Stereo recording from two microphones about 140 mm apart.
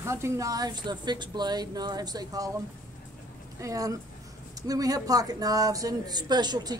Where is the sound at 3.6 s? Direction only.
25° right (ahead or behind).